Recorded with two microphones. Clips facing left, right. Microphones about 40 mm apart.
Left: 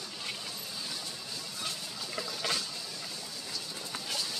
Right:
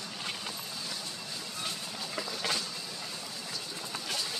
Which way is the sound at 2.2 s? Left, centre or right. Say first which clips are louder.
Even; centre.